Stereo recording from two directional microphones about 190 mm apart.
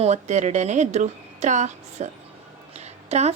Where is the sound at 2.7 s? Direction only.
35° right (ahead or behind).